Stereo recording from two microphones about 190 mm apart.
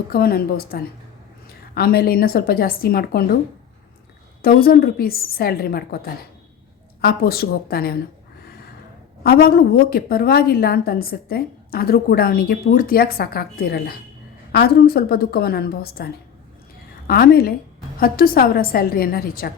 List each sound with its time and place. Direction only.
0.1 s a woman's voice: 55° left (ahead or behind)
4.4 s a woman's voice: 50° left (ahead or behind)
9.2 s a woman's voice: 50° left (ahead or behind)
17.1 s a woman's voice: 55° left (ahead or behind)